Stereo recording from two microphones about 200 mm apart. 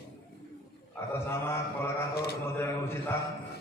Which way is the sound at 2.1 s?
50° left (ahead or behind).